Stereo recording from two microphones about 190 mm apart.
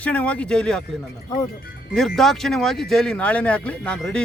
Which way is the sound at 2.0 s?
Centre (ahead or behind).